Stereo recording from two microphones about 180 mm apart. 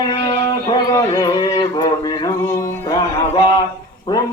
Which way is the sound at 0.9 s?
20° left (ahead or behind).